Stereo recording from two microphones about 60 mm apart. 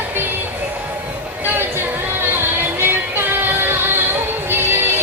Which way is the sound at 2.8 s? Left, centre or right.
Right.